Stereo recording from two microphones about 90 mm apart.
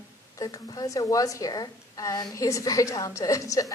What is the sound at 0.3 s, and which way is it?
A woman's voice, 40° left (ahead or behind).